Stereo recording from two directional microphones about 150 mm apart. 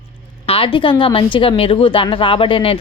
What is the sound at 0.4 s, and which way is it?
Speech, 40° left (ahead or behind).